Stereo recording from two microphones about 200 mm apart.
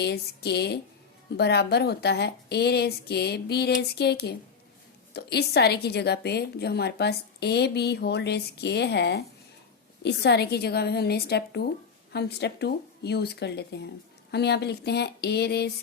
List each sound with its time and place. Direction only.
0.0 s a woman's voice: 55° left (ahead or behind)